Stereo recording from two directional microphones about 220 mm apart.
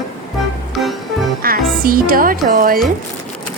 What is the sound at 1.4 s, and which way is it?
Speech, 40° right (ahead or behind).